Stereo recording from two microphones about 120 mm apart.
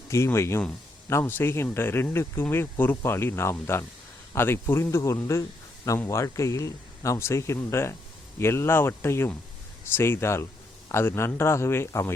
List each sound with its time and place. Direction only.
0.1 s speech: 20° left (ahead or behind)